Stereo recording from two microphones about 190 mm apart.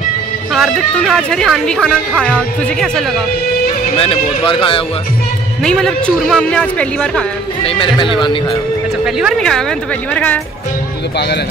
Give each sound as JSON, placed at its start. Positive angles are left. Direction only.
{"t": 0.5, "sound": "speech", "side_deg": 0}
{"t": 4.0, "sound": "speech", "side_deg": 30}
{"t": 5.6, "sound": "speech", "side_deg": 5}
{"t": 7.6, "sound": "speech", "side_deg": 25}
{"t": 9.0, "sound": "speech", "side_deg": 0}